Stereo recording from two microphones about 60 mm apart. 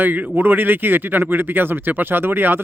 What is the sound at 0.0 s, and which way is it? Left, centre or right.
Speech, right.